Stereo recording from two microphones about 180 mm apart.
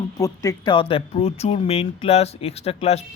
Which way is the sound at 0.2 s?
20° left (ahead or behind).